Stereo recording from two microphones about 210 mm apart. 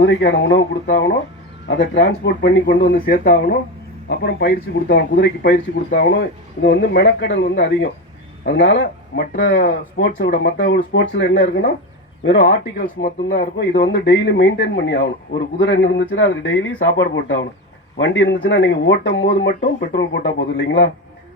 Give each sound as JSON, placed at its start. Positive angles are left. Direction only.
{"t": 0.0, "sound": "speech", "side_deg": 55}
{"t": 12.5, "sound": "speech", "side_deg": 40}